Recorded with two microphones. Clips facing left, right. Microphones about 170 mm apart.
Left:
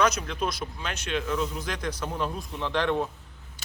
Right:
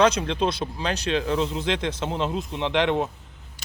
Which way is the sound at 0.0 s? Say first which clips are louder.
Right 5 dB; 30° right (ahead or behind).